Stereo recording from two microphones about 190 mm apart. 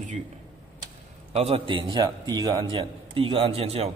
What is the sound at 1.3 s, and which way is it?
A man's voice, 30° right (ahead or behind).